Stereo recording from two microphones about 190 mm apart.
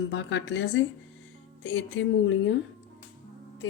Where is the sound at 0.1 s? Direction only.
75° left (ahead or behind).